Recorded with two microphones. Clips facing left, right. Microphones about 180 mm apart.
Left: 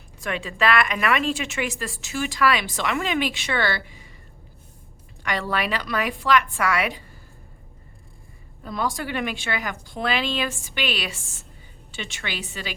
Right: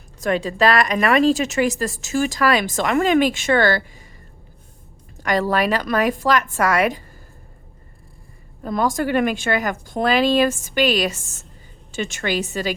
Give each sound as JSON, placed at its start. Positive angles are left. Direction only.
{"t": 0.2, "sound": "a woman's voice", "side_deg": -40}
{"t": 5.1, "sound": "a woman's voice", "side_deg": -40}
{"t": 8.6, "sound": "a woman's voice", "side_deg": -45}